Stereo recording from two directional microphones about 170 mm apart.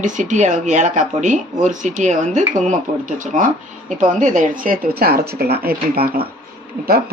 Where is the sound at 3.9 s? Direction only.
45° right (ahead or behind); by 6.1 s 65° right (ahead or behind).